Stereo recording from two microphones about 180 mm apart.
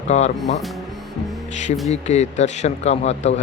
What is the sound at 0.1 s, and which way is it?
Speech, 40° left (ahead or behind).